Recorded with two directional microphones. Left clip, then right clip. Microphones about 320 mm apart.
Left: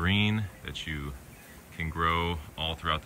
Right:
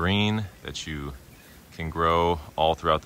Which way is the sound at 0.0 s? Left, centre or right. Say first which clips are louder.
Right 3 dB; centre.